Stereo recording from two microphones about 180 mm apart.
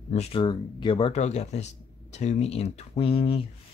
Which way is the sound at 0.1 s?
35° left (ahead or behind).